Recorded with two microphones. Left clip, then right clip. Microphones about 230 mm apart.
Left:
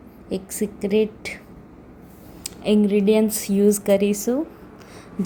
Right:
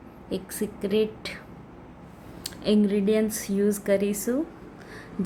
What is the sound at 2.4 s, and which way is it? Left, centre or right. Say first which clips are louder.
A woman's voice: left 4 dB; centre.